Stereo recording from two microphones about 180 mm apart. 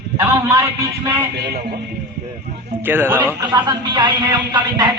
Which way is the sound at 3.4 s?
25° right (ahead or behind).